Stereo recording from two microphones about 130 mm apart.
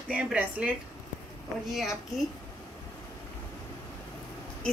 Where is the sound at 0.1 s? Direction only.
10° right (ahead or behind).